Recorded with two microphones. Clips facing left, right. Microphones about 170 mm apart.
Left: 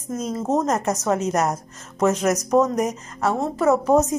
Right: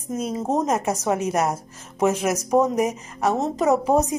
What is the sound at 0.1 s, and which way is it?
A woman's voice, 15° right (ahead or behind).